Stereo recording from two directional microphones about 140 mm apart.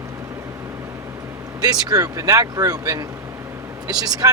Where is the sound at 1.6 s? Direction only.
25° right (ahead or behind).